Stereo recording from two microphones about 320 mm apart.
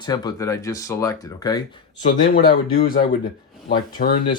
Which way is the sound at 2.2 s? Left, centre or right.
Left.